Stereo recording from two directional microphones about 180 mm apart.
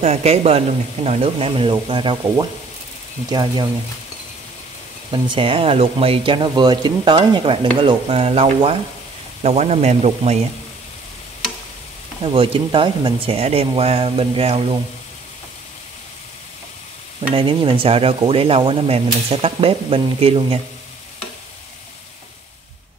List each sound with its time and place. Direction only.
0.0 s speech: 40° right (ahead or behind)
5.1 s speech: 30° right (ahead or behind)
12.2 s speech: 30° right (ahead or behind)
17.3 s speech: 30° right (ahead or behind)